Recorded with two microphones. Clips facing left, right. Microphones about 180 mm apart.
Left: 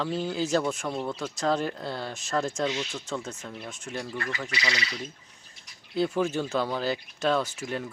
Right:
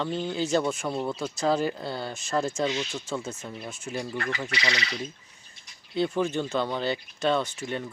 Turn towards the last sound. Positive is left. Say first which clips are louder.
# even
turn(degrees=0)  # may be behind; listen again after turning